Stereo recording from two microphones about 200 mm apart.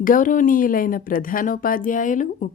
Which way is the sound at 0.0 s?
40° left (ahead or behind).